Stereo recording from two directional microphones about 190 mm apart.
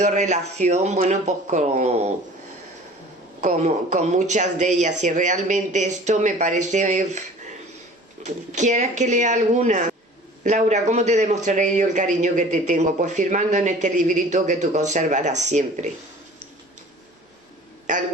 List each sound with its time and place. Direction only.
0.0 s speech: 40° right (ahead or behind)
3.4 s speech: 40° right (ahead or behind)